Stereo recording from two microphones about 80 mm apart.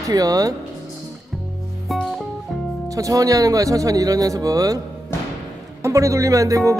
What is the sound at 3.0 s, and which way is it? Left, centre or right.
Speech, right.